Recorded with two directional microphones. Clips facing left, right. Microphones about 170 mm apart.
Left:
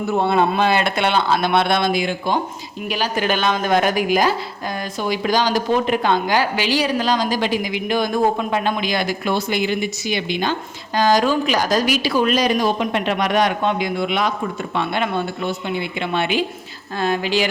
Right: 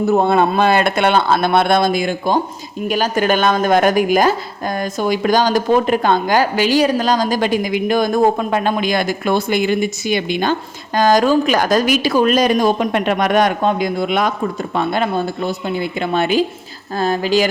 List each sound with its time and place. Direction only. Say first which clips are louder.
0.1 s speech: right 2 dB; 45° right (ahead or behind)